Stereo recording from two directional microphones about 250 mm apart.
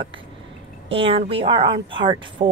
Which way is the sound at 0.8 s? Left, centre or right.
Right.